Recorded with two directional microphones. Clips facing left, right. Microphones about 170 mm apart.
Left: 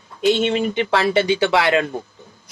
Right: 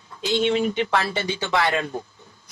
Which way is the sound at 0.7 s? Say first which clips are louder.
Left 6 dB; 75° left (ahead or behind).